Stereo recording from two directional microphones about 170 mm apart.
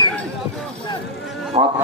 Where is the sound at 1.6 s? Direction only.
30° right (ahead or behind).